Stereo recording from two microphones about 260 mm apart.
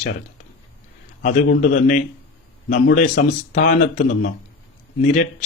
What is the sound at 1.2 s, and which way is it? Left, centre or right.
Speech, left.